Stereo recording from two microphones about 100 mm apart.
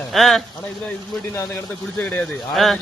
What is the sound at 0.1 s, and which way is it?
Speech, centre (ahead or behind).